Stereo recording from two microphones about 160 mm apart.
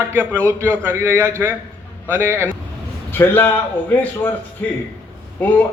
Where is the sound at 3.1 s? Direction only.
15° left (ahead or behind).